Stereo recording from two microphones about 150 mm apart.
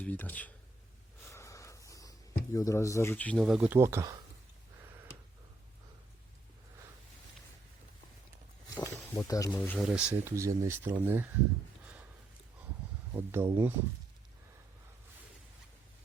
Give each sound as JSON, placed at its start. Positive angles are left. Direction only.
{"t": 0.0, "sound": "speech", "side_deg": 10}
{"t": 1.2, "sound": "a sound", "side_deg": 20}
{"t": 3.4, "sound": "speech", "side_deg": -10}
{"t": 9.0, "sound": "speech", "side_deg": 20}
{"t": 9.5, "sound": "speech", "side_deg": 5}
{"t": 9.9, "sound": "speech", "side_deg": -10}
{"t": 13.1, "sound": "speech", "side_deg": -15}